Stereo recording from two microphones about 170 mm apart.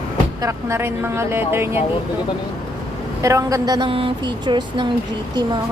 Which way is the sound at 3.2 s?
20° right (ahead or behind).